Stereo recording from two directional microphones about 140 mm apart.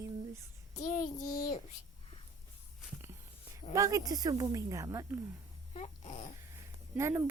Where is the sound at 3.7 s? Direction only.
20° right (ahead or behind).